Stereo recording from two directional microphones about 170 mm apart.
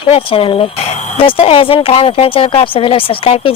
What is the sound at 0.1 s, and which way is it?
A woman's voice, 30° left (ahead or behind).